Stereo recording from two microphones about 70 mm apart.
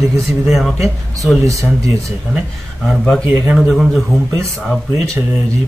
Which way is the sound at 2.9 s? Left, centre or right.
Centre.